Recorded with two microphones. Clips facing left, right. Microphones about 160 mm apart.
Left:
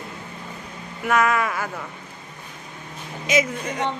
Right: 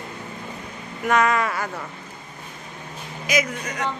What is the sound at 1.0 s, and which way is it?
Speech, 5° left (ahead or behind).